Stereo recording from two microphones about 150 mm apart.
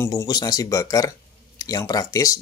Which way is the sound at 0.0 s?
20° left (ahead or behind).